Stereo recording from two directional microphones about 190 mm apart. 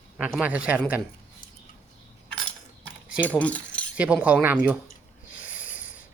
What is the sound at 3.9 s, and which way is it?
Speech, 5° right (ahead or behind).